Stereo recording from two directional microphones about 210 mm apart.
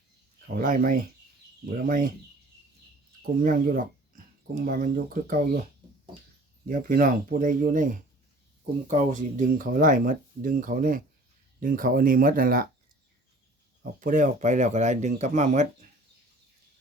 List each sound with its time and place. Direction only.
0.4 s speech: 40° right (ahead or behind)
3.4 s speech: 40° right (ahead or behind)
6.7 s speech: 40° right (ahead or behind)
8.9 s speech: 35° right (ahead or behind)
14.0 s speech: 40° right (ahead or behind)